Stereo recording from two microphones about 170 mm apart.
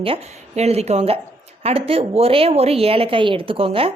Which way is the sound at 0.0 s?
35° right (ahead or behind).